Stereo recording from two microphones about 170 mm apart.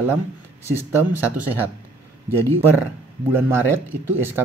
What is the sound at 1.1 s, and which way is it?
Speech, 10° right (ahead or behind).